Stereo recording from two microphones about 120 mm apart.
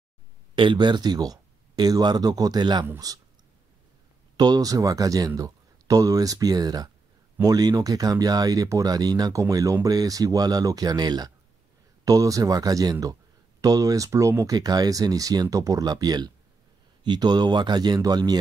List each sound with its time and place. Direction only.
0.6 s speech: 40° right (ahead or behind)
4.4 s speech: 30° right (ahead or behind)